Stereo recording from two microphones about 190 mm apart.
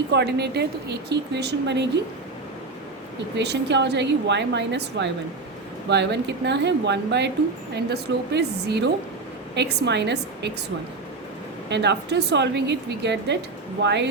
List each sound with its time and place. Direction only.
0.1 s speech: 60° right (ahead or behind)
3.3 s a woman's voice: 65° right (ahead or behind)
11.7 s speech: 65° right (ahead or behind)